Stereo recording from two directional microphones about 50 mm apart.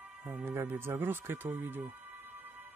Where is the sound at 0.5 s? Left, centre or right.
Right.